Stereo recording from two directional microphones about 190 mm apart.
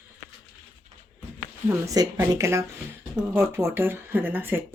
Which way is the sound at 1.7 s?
20° right (ahead or behind).